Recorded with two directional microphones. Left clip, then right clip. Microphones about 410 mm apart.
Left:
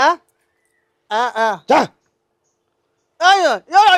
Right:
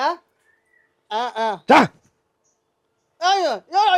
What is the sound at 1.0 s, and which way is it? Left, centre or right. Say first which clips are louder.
Speech: left 6 dB; left.